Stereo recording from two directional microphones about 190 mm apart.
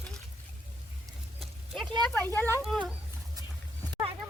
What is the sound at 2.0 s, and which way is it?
Speech, 10° left (ahead or behind).